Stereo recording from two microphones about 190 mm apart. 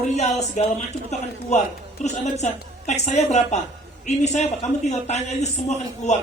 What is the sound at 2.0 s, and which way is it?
Speech, 35° left (ahead or behind).